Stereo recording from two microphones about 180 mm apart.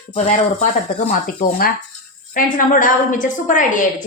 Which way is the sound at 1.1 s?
50° left (ahead or behind).